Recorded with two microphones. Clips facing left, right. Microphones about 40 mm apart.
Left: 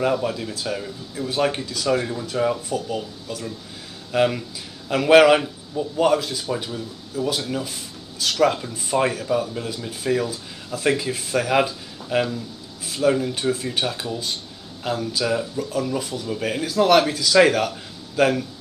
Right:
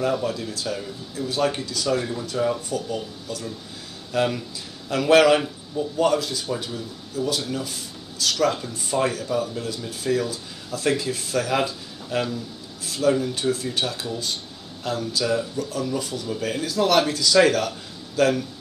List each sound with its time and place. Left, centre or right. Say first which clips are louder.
0.0 s speech: left 2 dB; left